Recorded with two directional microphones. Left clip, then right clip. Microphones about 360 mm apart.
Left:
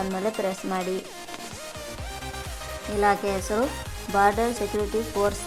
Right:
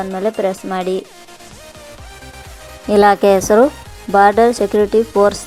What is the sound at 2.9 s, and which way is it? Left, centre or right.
A woman's voice, right.